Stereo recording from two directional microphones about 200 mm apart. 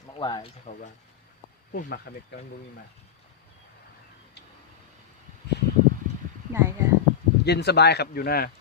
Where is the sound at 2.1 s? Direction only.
55° left (ahead or behind).